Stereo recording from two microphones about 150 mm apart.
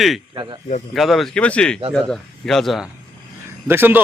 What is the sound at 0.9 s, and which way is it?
Speech, centre (ahead or behind).